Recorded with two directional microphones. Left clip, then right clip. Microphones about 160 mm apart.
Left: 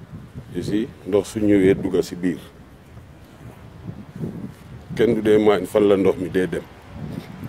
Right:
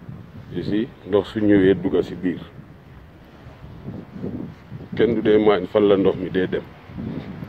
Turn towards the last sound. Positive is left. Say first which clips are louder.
# even
turn(degrees=30)  # may be behind; listen again after turning